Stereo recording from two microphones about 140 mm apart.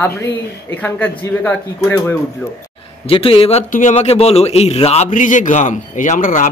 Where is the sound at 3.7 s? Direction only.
60° left (ahead or behind).